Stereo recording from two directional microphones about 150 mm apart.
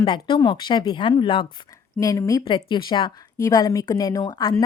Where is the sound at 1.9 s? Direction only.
20° left (ahead or behind).